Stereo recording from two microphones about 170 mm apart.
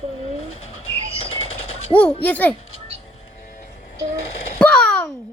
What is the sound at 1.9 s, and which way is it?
Speech, 10° left (ahead or behind).